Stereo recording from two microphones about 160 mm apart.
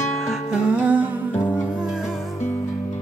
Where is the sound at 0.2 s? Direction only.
5° right (ahead or behind).